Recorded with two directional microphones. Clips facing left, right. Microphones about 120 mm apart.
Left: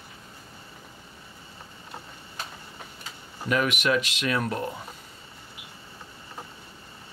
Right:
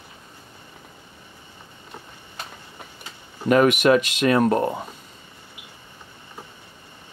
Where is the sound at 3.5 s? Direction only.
45° right (ahead or behind).